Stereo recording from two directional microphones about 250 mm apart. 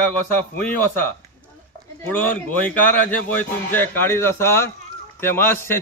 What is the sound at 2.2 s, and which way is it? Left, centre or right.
A man's voice, centre.